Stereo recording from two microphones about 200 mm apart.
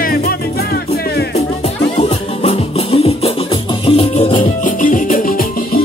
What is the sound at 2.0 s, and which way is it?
Music, 35° left (ahead or behind).